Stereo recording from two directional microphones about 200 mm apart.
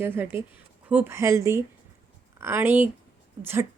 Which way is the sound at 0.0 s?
10° right (ahead or behind).